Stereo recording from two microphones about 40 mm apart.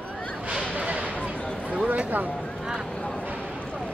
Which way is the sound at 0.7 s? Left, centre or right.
Right.